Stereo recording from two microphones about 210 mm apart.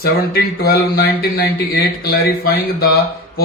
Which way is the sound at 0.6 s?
45° left (ahead or behind).